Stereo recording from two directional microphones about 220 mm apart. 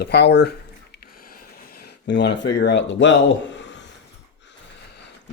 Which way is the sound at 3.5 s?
55° left (ahead or behind).